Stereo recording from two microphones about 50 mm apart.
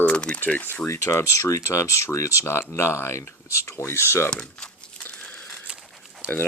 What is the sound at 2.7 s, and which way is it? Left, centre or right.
Speech, left.